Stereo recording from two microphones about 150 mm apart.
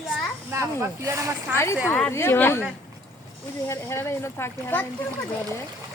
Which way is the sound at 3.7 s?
20° left (ahead or behind).